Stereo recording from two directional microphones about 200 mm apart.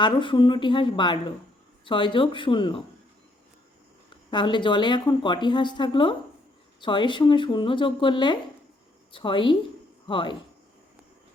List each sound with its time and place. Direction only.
0.0 s speech: 25° left (ahead or behind)
4.3 s speech: 25° left (ahead or behind)